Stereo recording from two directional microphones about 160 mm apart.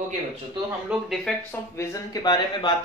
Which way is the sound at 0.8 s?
Centre (ahead or behind).